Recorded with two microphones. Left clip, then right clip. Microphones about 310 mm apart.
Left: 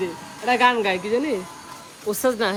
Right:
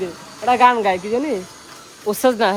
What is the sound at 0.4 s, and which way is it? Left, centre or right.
Speech, centre.